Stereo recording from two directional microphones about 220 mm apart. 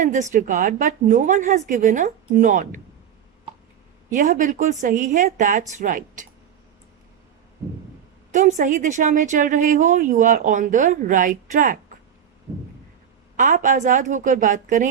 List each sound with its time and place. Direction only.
0.0 s speech: 35° right (ahead or behind)
4.1 s speech: 35° right (ahead or behind)
8.3 s speech: 35° right (ahead or behind)
13.3 s speech: 35° right (ahead or behind)